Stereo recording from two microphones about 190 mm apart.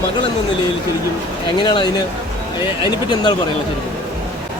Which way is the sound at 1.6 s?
25° left (ahead or behind).